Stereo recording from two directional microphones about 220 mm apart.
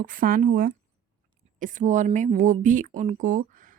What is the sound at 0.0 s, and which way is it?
Speech, 40° right (ahead or behind).